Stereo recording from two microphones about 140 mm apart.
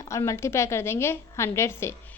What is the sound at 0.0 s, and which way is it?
A woman's voice, 20° left (ahead or behind).